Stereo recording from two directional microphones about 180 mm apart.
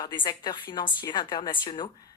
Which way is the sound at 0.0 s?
25° left (ahead or behind).